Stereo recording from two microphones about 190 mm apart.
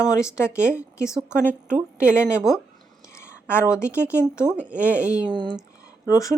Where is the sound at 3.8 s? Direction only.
15° left (ahead or behind).